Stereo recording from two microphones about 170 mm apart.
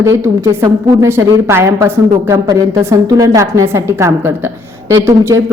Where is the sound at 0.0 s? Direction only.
15° right (ahead or behind).